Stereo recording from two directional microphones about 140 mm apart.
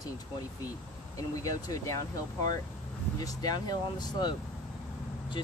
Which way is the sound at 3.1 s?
25° left (ahead or behind).